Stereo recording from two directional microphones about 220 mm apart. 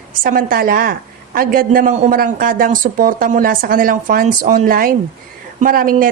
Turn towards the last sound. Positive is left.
turn(degrees=-40)  # may be behind; listen again after turning